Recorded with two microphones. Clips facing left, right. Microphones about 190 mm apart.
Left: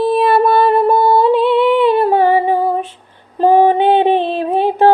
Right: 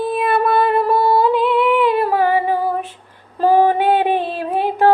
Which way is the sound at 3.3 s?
20° left (ahead or behind).